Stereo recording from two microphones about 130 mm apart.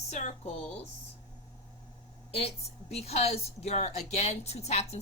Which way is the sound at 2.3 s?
50° left (ahead or behind).